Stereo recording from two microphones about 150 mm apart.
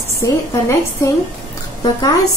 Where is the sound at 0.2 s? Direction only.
20° left (ahead or behind).